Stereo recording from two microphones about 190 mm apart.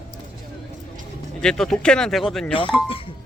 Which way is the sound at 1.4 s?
Centre (ahead or behind).